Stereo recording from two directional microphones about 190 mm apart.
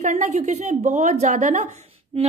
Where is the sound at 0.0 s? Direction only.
40° right (ahead or behind).